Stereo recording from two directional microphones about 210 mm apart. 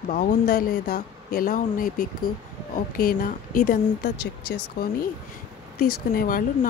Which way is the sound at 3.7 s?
50° left (ahead or behind).